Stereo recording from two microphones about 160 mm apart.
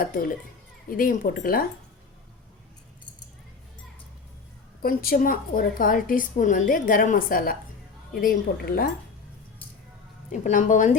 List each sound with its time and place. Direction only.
0.0 s a woman's voice: 60° left (ahead or behind)
4.8 s a woman's voice: 70° left (ahead or behind)
10.3 s a woman's voice: 50° left (ahead or behind)